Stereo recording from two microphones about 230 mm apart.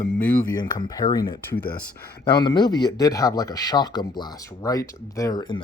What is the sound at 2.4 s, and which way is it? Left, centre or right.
Speech, centre.